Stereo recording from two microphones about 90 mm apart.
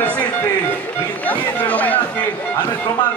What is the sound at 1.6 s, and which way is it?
Speech, 15° left (ahead or behind).